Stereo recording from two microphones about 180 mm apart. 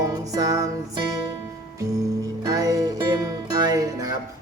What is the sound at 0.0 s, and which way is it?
Music, 20° right (ahead or behind).